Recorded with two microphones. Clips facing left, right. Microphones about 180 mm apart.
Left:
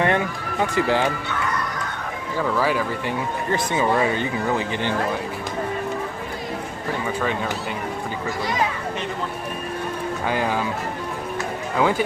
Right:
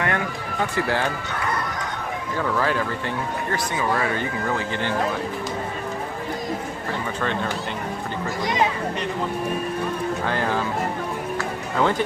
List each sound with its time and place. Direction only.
0.0 s speech: 25° left (ahead or behind)
2.6 s speech: 10° left (ahead or behind)
3.5 s speech: 20° left (ahead or behind)
10.2 s speech: 10° left (ahead or behind)
11.8 s speech: 5° left (ahead or behind)